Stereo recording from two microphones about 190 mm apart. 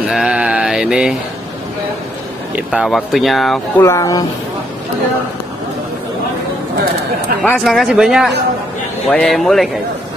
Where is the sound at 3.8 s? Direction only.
15° left (ahead or behind).